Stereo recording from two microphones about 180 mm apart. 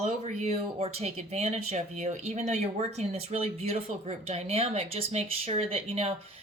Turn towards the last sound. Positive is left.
turn(degrees=-35)  # may be behind; listen again after turning